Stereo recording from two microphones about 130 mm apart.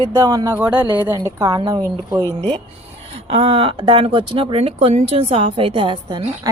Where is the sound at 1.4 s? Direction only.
25° right (ahead or behind).